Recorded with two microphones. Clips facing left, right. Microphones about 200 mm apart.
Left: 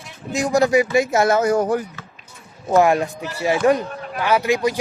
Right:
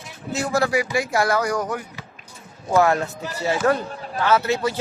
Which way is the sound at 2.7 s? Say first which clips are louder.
Left 3 dB; 15° left (ahead or behind).